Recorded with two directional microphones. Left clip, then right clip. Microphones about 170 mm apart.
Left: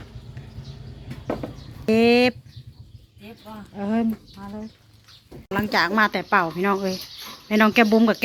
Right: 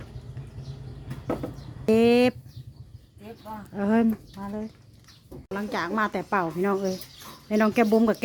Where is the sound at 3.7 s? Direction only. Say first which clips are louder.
Right 1 dB; 45° right (ahead or behind).